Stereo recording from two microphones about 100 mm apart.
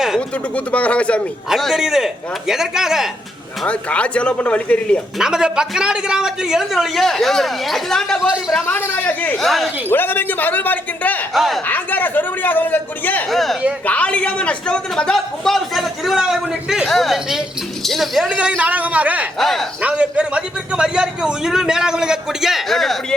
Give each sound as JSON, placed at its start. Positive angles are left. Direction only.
{"t": 0.2, "sound": "a man's voice", "side_deg": 15}
{"t": 1.5, "sound": "a man's voice", "side_deg": 0}
{"t": 3.7, "sound": "a man's voice", "side_deg": 10}
{"t": 5.2, "sound": "a man's voice", "side_deg": -5}
{"t": 8.6, "sound": "a man's voice", "side_deg": 20}
{"t": 9.4, "sound": "a man's voice", "side_deg": 0}
{"t": 9.9, "sound": "a man's voice", "side_deg": 20}
{"t": 11.3, "sound": "a man's voice", "side_deg": 0}
{"t": 11.6, "sound": "a man's voice", "side_deg": 15}
{"t": 13.3, "sound": "a man's voice", "side_deg": 0}
{"t": 13.8, "sound": "a man's voice", "side_deg": 15}
{"t": 19.4, "sound": "a man's voice", "side_deg": 0}
{"t": 19.8, "sound": "a man's voice", "side_deg": -10}